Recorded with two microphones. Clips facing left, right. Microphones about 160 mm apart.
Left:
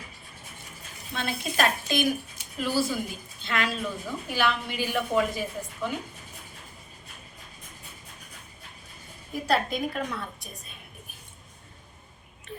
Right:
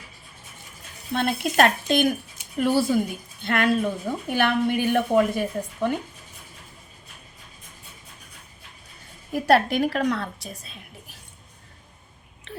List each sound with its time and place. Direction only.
1.1 s a woman's voice: 60° right (ahead or behind)
9.3 s a woman's voice: 70° right (ahead or behind); by 11.2 s 90° right
12.5 s a sound: 80° right